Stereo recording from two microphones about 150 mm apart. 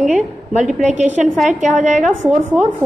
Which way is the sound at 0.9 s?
50° right (ahead or behind).